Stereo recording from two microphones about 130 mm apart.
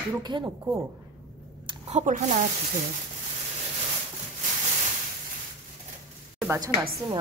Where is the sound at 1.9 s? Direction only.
70° right (ahead or behind).